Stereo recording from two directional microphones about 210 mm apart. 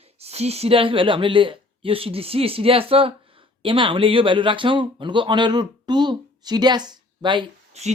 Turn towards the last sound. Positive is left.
turn(degrees=-25)  # may be behind; listen again after turning